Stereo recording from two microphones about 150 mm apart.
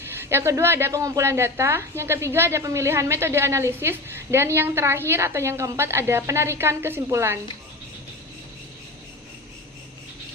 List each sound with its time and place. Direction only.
0.2 s a woman's voice: 15° right (ahead or behind)